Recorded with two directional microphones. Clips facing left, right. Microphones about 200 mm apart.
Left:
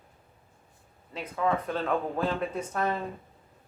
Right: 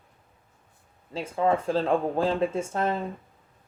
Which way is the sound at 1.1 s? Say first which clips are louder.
Right 4 dB; 30° right (ahead or behind).